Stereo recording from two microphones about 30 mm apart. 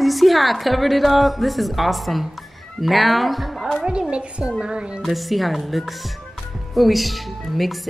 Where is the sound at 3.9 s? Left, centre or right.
Right.